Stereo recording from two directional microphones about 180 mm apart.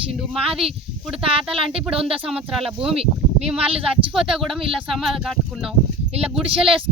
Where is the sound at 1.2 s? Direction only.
30° right (ahead or behind).